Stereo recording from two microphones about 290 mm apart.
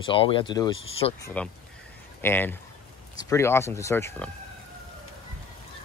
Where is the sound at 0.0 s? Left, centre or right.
Centre.